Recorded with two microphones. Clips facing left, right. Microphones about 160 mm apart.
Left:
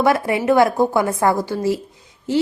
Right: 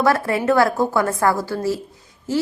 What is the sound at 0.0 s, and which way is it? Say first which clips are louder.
A woman's voice: left 1 dB; 15° left (ahead or behind).